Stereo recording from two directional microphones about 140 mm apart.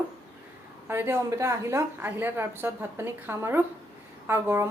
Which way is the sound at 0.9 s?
15° right (ahead or behind).